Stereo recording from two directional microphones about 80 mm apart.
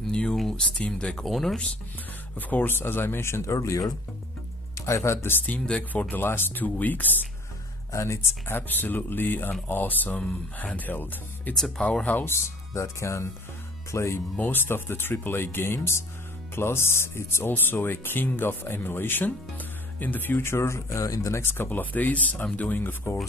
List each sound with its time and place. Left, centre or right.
0.0 s speech: centre
2.3 s speech: left
5.5 s speech: centre
7.9 s speech: left
12.4 s speech: left
21.4 s speech: left